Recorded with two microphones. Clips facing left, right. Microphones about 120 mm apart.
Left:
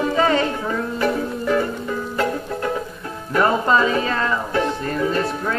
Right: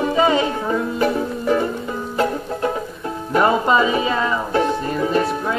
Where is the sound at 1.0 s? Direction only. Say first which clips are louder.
Right 2 dB; 25° right (ahead or behind).